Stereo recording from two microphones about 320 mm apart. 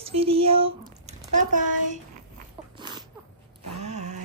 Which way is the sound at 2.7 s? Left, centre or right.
Centre.